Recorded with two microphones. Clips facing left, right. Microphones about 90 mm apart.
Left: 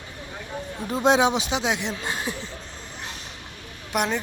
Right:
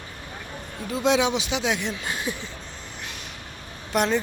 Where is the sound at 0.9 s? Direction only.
40° left (ahead or behind).